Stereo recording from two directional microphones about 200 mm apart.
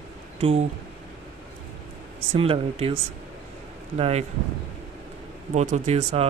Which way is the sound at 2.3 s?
30° right (ahead or behind).